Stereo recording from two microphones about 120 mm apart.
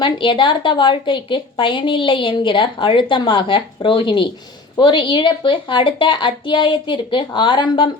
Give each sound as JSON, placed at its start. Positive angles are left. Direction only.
{"t": 0.0, "sound": "a woman's voice", "side_deg": 45}